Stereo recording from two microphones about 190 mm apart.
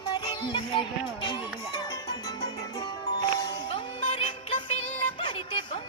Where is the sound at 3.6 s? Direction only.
30° left (ahead or behind).